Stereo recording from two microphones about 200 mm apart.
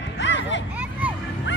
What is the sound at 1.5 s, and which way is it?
Music, 65° left (ahead or behind).